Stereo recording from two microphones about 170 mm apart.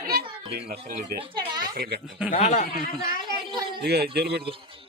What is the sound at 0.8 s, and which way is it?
Speech, 35° right (ahead or behind).